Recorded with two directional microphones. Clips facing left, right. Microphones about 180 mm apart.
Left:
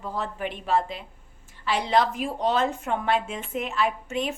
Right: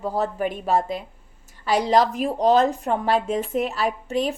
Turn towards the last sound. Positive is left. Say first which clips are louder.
# right 5 dB
turn(degrees=-35)  # may be behind; listen again after turning